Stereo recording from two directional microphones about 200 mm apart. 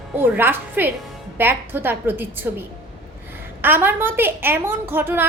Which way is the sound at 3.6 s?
10° right (ahead or behind).